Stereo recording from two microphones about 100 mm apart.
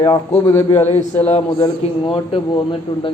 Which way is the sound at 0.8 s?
90° left.